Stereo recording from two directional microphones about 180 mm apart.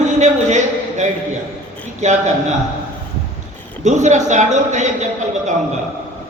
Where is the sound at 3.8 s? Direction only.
40° right (ahead or behind).